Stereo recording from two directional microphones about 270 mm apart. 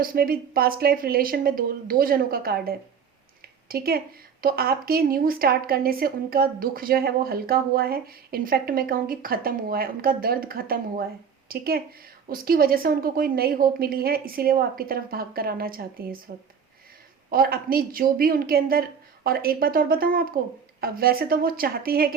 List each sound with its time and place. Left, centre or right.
0.0 s a woman's voice: right
17.2 s a woman's voice: right